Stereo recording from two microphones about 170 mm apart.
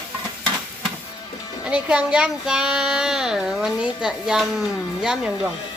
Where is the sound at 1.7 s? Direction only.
5° right (ahead or behind).